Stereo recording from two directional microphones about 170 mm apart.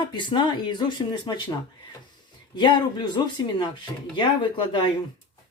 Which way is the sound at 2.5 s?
25° left (ahead or behind).